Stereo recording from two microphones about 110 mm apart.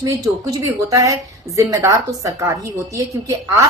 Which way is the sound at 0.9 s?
30° right (ahead or behind).